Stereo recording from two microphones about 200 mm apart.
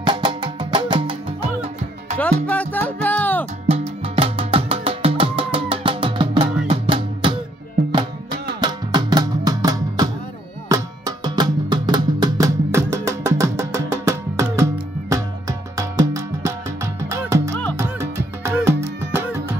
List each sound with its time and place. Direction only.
0.0 s music: 25° right (ahead or behind)
2.4 s music: 5° left (ahead or behind)
3.6 s music: 30° right (ahead or behind)
8.5 s music: 20° right (ahead or behind)
17.7 s music: 10° right (ahead or behind)